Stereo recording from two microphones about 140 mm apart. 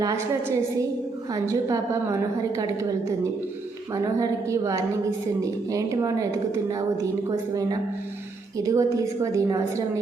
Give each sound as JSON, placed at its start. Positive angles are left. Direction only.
{"t": 0.0, "sound": "a woman's voice", "side_deg": -20}
{"t": 3.9, "sound": "a woman's voice", "side_deg": -25}